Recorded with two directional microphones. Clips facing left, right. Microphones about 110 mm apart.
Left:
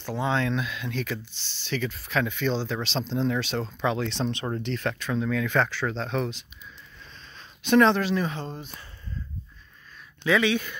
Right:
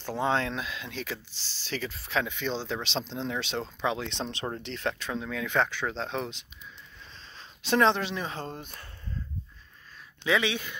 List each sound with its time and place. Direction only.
0.2 s speech: 35° right (ahead or behind)
8.5 s speech: 50° right (ahead or behind)
10.2 s speech: 25° right (ahead or behind)